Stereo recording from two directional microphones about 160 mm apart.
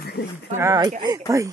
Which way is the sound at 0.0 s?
90° left.